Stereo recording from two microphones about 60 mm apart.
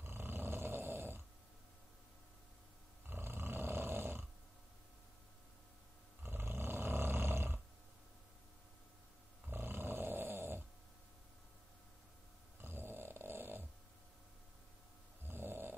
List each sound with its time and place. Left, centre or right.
0.0 s roar: right
3.1 s roar: right
6.2 s roar: right
9.5 s roar: right
12.6 s dog: right
15.2 s snoring: right